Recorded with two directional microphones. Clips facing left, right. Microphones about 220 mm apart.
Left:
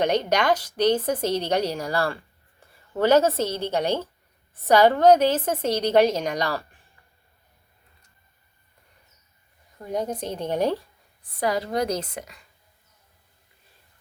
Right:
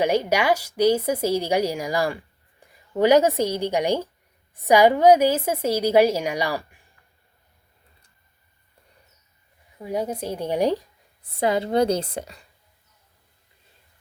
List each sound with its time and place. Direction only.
0.0 s a woman's voice: 10° right (ahead or behind)
9.7 s a woman's voice: 5° right (ahead or behind)
11.3 s a woman's voice: 25° right (ahead or behind)